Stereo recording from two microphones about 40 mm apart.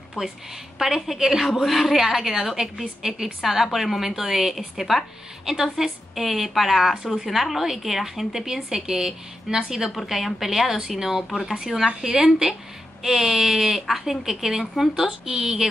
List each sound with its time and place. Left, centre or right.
0.2 s a woman's voice: centre
9.9 s a woman's voice: centre